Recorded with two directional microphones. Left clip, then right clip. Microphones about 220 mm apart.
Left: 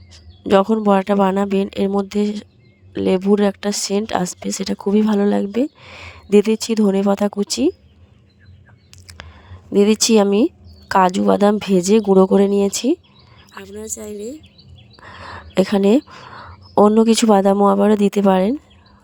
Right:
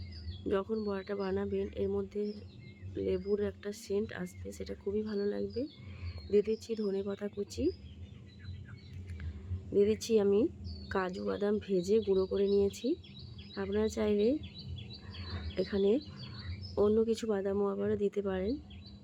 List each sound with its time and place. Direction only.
0.4 s speech: 50° left (ahead or behind)
9.7 s speech: 50° left (ahead or behind)
13.7 s a woman's voice: centre (ahead or behind)
15.0 s speech: 50° left (ahead or behind)